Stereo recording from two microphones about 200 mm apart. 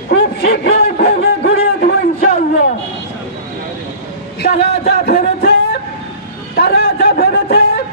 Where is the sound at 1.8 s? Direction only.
35° left (ahead or behind).